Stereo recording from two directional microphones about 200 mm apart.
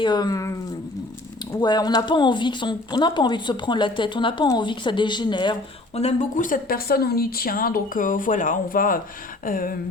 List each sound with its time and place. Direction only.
0.0 s speech: 20° left (ahead or behind)
1.6 s speech: 20° left (ahead or behind)
6.0 s speech: 35° left (ahead or behind)